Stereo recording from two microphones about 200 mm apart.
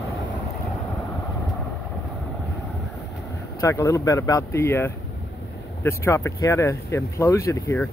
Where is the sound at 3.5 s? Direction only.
15° left (ahead or behind).